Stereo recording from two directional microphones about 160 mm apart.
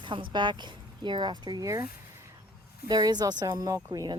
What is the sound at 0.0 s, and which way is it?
Speech, 30° right (ahead or behind).